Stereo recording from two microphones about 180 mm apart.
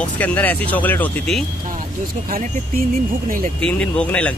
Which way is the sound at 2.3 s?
50° right (ahead or behind).